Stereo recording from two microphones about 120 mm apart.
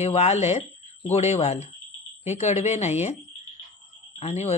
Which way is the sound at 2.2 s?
70° left (ahead or behind).